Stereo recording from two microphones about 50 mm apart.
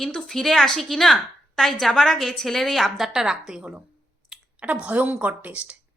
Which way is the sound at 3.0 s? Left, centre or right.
Centre.